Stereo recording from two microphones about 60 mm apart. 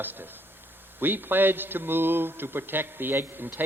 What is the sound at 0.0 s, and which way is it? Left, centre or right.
A man's voice, right.